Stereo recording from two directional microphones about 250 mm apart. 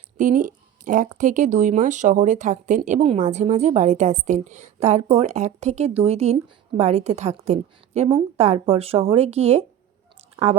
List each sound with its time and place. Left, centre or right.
0.2 s speech: right